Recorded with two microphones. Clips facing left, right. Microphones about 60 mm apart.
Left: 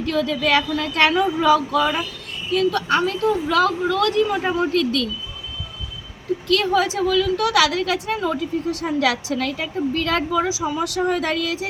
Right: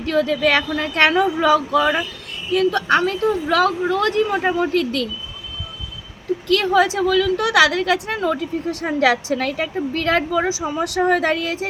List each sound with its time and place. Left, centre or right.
0.0 s a woman's voice: right
3.8 s a woman's voice: right
6.6 s a woman's voice: right